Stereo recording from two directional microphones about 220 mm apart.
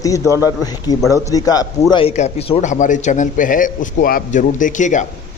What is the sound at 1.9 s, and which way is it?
A man's voice, 25° left (ahead or behind).